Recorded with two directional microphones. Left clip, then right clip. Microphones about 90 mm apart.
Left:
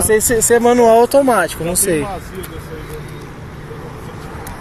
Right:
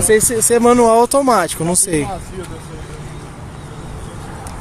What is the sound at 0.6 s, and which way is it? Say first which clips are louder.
Speech: even; 65° right (ahead or behind).